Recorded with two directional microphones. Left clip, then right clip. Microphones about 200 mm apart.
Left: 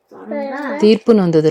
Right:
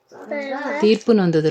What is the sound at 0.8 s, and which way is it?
Speech, 10° left (ahead or behind).